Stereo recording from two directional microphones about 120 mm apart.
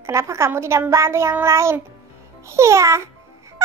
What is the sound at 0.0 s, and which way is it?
Speech, 25° right (ahead or behind).